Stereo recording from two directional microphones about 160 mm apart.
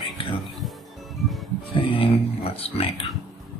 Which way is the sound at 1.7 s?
30° left (ahead or behind).